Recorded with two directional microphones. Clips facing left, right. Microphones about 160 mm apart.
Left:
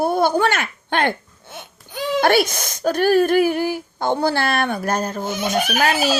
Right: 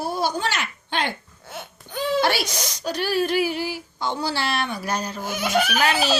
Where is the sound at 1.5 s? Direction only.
15° left (ahead or behind).